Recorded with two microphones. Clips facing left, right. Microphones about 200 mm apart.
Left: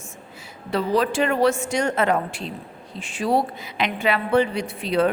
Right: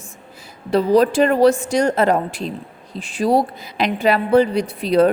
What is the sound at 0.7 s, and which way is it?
A woman's voice, 40° right (ahead or behind).